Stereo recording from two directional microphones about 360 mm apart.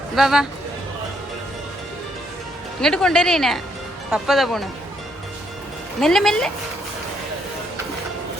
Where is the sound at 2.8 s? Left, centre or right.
Centre.